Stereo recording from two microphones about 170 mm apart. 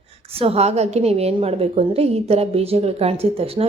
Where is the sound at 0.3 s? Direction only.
35° right (ahead or behind).